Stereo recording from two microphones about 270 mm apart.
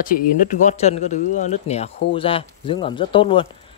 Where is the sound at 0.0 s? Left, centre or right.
Left.